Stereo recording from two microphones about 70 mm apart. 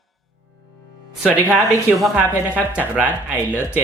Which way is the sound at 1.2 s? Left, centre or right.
Centre.